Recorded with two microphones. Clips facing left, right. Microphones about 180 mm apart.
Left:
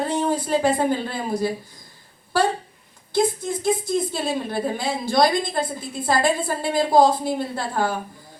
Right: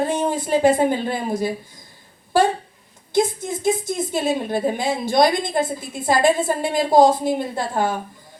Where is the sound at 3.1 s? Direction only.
20° right (ahead or behind).